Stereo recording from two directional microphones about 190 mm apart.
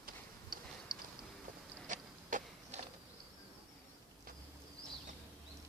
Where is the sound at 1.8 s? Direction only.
45° right (ahead or behind).